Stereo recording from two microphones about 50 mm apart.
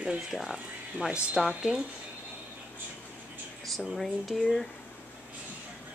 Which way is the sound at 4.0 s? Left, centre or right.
Centre.